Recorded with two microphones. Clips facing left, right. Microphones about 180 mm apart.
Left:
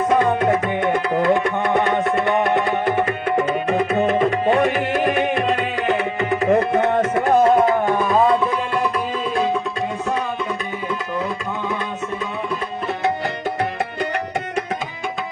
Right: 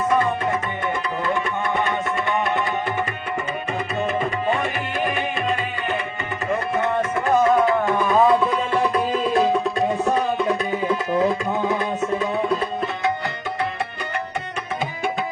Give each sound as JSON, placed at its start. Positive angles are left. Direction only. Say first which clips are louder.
{"t": 0.3, "sound": "music", "louder": "left 6 dB", "side_deg": 65}
{"t": 7.4, "sound": "music", "louder": "left 1 dB", "side_deg": 35}
{"t": 8.0, "sound": "music", "louder": "right 1 dB", "side_deg": 0}